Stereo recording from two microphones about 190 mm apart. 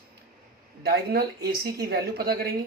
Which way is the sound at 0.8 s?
55° right (ahead or behind).